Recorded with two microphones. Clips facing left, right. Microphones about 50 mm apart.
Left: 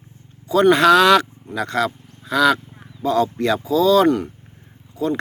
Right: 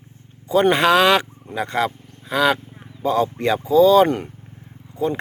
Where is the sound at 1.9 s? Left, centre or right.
Centre.